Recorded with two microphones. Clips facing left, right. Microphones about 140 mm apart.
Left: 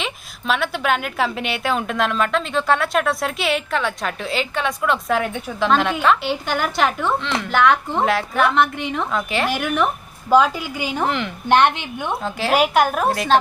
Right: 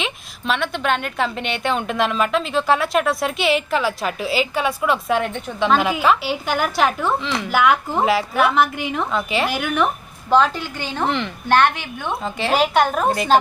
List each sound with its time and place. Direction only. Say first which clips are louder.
0.0 s a woman's voice: right 1 dB; centre (ahead or behind)
11.4 s a woman's voice: left 1 dB; 20° left (ahead or behind)
12.2 s a woman's voice: left 1 dB; centre (ahead or behind)